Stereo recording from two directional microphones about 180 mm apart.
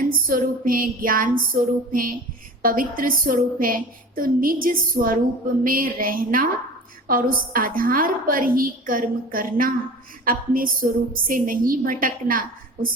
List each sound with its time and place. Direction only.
0.0 s a woman's voice: 50° right (ahead or behind)